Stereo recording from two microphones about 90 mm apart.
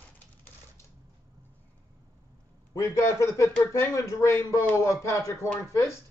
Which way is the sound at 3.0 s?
35° left (ahead or behind).